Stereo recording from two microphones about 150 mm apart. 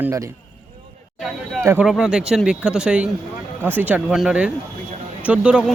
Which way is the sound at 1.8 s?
5° right (ahead or behind).